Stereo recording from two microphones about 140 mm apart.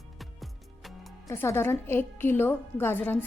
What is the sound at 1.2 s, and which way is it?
Speech, 15° left (ahead or behind).